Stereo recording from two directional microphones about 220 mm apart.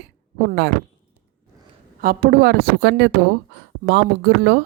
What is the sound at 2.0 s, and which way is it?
Speech, 40° right (ahead or behind).